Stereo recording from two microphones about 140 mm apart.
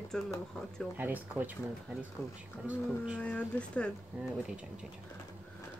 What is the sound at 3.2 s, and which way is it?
Speech, 10° left (ahead or behind).